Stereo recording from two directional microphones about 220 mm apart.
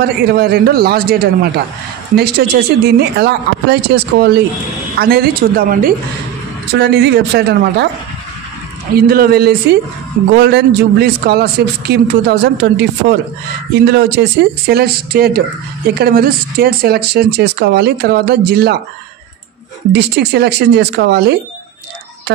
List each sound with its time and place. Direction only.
0.0 s a man's voice: 45° right (ahead or behind)
8.9 s a man's voice: 45° right (ahead or behind)
19.9 s a man's voice: 50° right (ahead or behind)